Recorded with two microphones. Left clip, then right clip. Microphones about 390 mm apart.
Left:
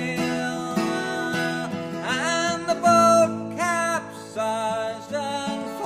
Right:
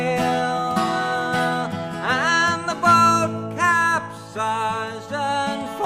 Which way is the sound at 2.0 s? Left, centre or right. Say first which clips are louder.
Right 5 dB; right.